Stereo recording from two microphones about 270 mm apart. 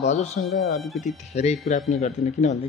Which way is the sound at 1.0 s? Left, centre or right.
Left.